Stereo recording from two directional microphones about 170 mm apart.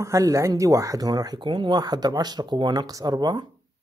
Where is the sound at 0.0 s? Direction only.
15° right (ahead or behind).